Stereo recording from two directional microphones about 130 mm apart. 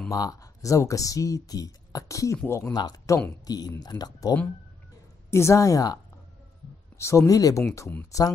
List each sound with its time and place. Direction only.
0.1 s speech: 25° left (ahead or behind)
2.7 s speech: 30° left (ahead or behind)
7.0 s speech: 20° left (ahead or behind)